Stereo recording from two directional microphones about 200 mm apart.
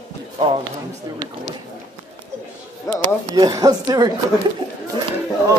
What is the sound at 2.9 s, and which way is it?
Speech, 15° left (ahead or behind).